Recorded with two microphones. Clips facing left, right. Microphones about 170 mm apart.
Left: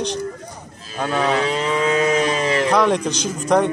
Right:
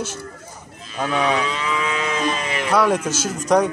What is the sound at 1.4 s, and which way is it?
Moo, 35° left (ahead or behind).